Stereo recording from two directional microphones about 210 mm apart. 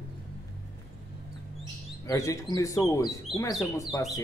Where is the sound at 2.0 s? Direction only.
15° left (ahead or behind).